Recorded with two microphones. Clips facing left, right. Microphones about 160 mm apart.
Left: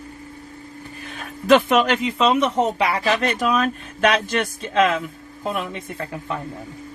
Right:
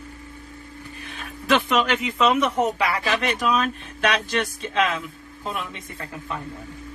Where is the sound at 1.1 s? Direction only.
45° left (ahead or behind).